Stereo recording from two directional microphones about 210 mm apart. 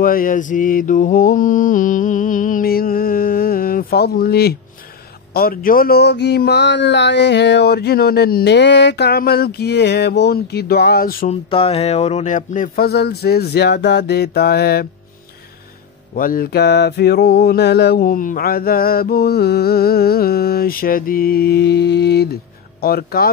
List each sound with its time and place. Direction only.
0.0 s mantra: 40° left (ahead or behind)
5.3 s music: 45° left (ahead or behind)
11.5 s music: 25° left (ahead or behind); by 14.9 s 50° left (ahead or behind)
16.2 s music: 45° left (ahead or behind)